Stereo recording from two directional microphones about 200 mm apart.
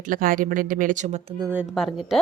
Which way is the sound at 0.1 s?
45° right (ahead or behind).